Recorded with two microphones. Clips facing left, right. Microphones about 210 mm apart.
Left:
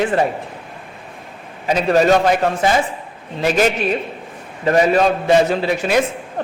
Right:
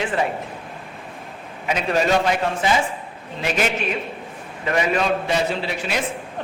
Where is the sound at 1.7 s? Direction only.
40° left (ahead or behind).